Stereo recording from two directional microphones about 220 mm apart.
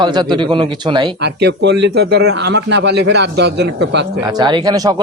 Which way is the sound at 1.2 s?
50° right (ahead or behind).